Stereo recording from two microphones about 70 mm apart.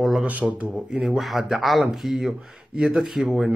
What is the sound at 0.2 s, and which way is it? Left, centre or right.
Speech, centre.